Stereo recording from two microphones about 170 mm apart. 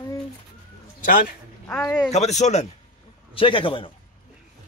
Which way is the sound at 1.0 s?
50° left (ahead or behind).